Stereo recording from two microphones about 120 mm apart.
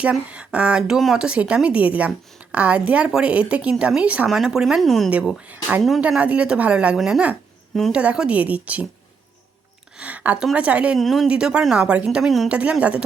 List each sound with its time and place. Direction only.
0.0 s speech: 10° right (ahead or behind)
5.5 s speech: 15° right (ahead or behind)
10.0 s speech: 10° right (ahead or behind)
10.9 s speech: centre (ahead or behind)